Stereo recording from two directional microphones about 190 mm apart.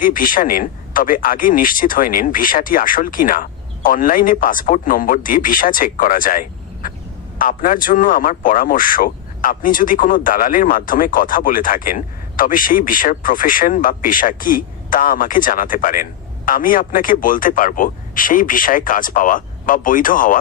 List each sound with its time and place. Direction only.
0.0 s a man's voice: 45° left (ahead or behind)
6.8 s a sound: 45° left (ahead or behind)
7.3 s a man's voice: 45° left (ahead or behind)